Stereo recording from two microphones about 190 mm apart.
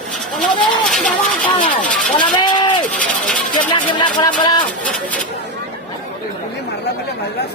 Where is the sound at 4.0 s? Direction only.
25° left (ahead or behind).